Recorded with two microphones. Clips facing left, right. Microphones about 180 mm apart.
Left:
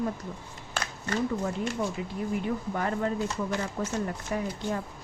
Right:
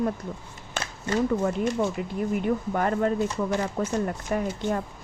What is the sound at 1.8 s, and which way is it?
A woman's voice, 55° right (ahead or behind).